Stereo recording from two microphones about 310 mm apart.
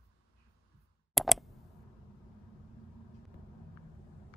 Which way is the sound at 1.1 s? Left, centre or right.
Centre.